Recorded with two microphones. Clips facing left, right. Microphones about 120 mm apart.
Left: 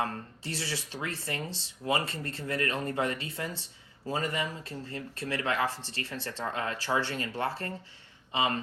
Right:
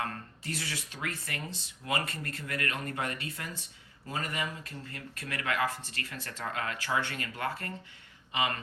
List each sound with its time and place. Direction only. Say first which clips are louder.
0.0 s speech: left 3 dB; 30° left (ahead or behind)